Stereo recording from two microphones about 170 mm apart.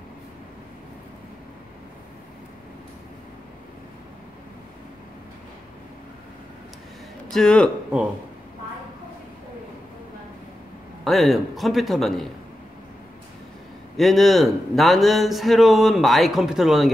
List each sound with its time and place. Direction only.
7.2 s speech: 5° left (ahead or behind)
11.1 s speech: centre (ahead or behind)
13.9 s speech: centre (ahead or behind)